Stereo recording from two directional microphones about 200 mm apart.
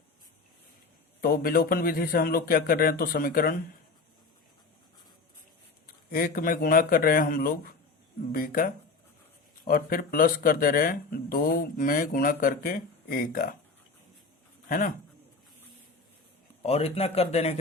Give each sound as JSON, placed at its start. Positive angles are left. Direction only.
{"t": 1.2, "sound": "speech", "side_deg": 45}
{"t": 6.1, "sound": "speech", "side_deg": 45}
{"t": 14.7, "sound": "speech", "side_deg": 40}
{"t": 16.6, "sound": "speech", "side_deg": 30}